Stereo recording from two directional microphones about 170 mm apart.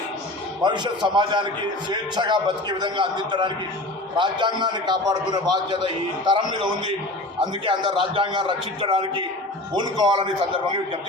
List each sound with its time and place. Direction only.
0.6 s a man's voice: 25° right (ahead or behind)